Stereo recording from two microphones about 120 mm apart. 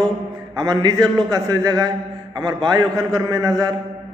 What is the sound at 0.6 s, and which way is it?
A man's voice, 35° right (ahead or behind).